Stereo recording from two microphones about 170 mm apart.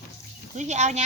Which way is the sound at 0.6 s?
45° right (ahead or behind).